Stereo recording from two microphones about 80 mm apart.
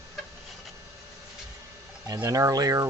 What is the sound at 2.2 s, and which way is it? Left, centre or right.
Speech, right.